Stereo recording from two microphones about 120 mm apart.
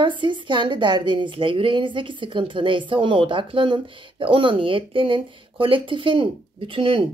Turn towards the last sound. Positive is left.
turn(degrees=-50)  # may be behind; listen again after turning